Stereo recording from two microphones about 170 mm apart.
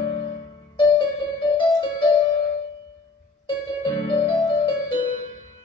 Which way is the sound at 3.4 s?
25° left (ahead or behind).